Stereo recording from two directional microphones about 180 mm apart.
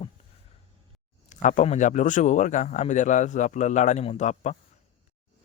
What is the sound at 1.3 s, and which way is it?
A man's voice, 45° left (ahead or behind).